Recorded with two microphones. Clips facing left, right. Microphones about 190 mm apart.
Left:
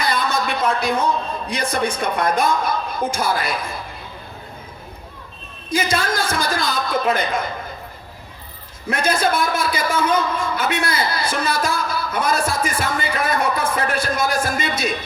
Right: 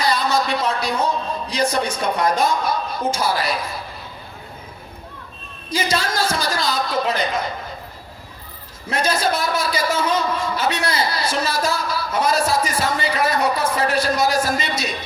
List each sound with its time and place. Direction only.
0.0 s a sound: 55° left (ahead or behind)
1.5 s a man's voice: 55° left (ahead or behind)
5.7 s a woman's voice: 50° left (ahead or behind)
8.9 s a man's voice: 50° left (ahead or behind)